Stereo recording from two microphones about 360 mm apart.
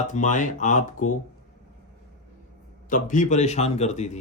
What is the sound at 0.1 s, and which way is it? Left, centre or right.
Speech, centre.